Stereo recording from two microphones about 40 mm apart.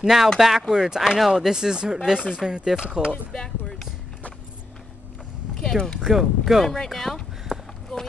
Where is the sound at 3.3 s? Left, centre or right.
Centre.